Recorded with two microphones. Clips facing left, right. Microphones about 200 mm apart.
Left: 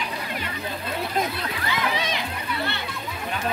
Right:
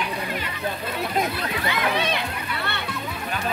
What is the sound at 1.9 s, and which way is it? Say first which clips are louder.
Music: right 3 dB; 60° right (ahead or behind).